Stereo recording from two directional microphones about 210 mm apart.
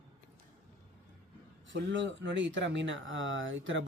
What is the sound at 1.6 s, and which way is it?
Speech, 60° right (ahead or behind).